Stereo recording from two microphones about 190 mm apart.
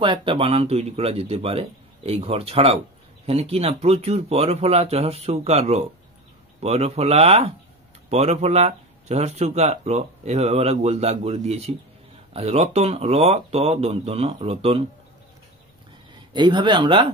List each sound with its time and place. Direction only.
0.0 s speech: 25° right (ahead or behind)
16.3 s speech: 25° right (ahead or behind)